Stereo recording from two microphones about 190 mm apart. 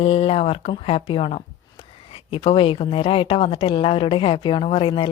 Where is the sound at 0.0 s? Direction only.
30° left (ahead or behind).